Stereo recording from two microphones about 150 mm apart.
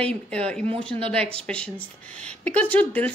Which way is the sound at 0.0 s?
10° left (ahead or behind).